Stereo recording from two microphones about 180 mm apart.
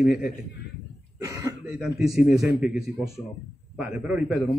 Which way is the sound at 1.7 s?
5° right (ahead or behind).